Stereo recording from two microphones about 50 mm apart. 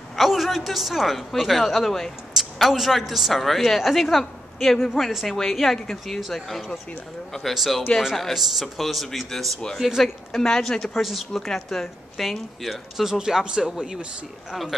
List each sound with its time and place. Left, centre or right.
0.1 s a woman's voice: centre
10.3 s speech: centre